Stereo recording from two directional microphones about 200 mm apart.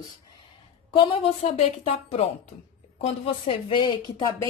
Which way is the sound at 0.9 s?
25° left (ahead or behind).